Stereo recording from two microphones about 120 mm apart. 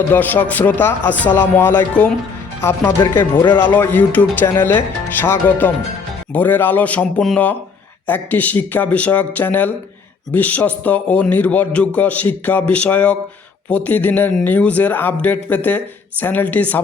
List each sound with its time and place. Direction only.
0.1 s speech: 15° left (ahead or behind)
3.2 s speech: 40° left (ahead or behind)
3.6 s speech: 15° left (ahead or behind)